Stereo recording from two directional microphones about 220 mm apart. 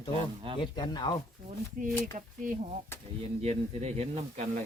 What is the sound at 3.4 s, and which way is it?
Speech, 30° right (ahead or behind).